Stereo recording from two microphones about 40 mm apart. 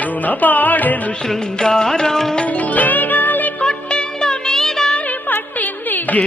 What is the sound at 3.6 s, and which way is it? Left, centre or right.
Music, left.